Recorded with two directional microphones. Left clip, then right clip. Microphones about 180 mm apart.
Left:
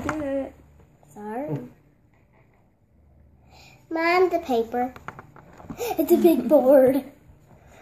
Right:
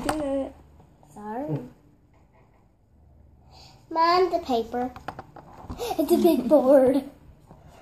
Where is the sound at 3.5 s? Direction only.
35° left (ahead or behind).